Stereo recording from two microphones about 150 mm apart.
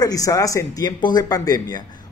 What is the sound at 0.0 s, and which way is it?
Speech, 25° left (ahead or behind).